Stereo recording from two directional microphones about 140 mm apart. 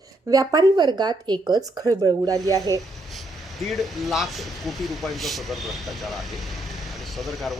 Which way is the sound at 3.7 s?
Centre (ahead or behind).